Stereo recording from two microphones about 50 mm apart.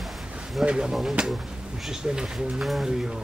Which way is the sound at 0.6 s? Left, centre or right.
Centre.